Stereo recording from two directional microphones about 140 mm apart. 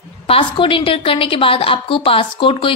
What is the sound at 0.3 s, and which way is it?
A woman's voice, 40° left (ahead or behind).